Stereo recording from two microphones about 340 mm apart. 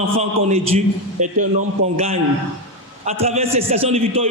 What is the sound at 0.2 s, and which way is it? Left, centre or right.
A man's voice, centre.